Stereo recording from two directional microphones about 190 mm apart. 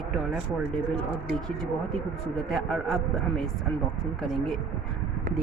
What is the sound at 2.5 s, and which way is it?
A man's voice, centre (ahead or behind).